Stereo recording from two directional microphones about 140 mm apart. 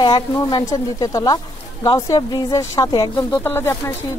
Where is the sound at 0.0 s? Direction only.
30° left (ahead or behind).